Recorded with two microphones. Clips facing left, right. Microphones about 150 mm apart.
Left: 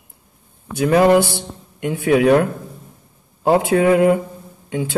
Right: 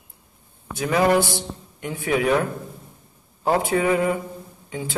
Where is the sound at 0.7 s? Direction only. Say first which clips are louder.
Left 7 dB; 55° left (ahead or behind).